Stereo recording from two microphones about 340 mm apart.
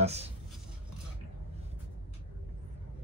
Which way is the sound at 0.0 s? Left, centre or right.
Centre.